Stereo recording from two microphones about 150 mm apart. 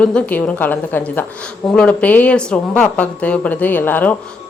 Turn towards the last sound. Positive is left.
turn(degrees=10)  # may be behind; listen again after turning